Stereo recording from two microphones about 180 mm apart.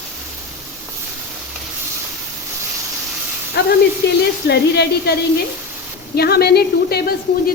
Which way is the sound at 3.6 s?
65° left (ahead or behind).